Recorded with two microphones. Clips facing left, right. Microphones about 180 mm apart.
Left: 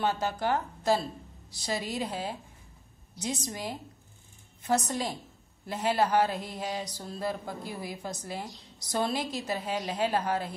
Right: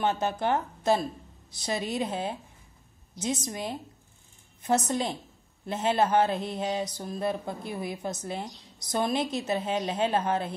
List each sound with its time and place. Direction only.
0.0 s mantra: 20° right (ahead or behind)